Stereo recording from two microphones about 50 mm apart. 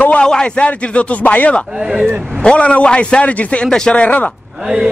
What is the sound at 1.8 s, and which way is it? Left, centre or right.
Speech, centre.